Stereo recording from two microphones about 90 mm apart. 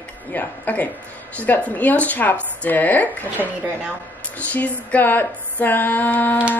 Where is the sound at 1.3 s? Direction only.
15° left (ahead or behind).